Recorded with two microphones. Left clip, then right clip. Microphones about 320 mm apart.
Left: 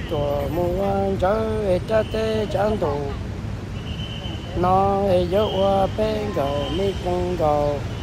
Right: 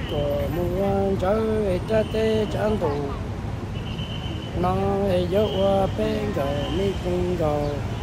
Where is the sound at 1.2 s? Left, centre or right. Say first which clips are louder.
Left 1 dB; centre.